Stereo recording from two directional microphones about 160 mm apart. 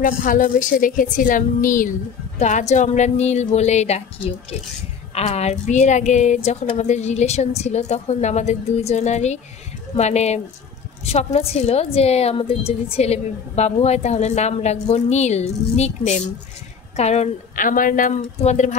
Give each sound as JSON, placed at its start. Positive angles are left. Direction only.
{"t": 0.0, "sound": "a woman's voice", "side_deg": 60}
{"t": 5.1, "sound": "a woman's voice", "side_deg": 40}